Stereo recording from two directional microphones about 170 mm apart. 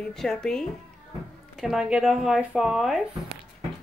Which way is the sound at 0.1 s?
5° left (ahead or behind).